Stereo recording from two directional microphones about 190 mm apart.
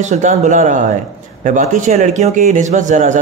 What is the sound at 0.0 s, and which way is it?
A man's voice, 40° right (ahead or behind).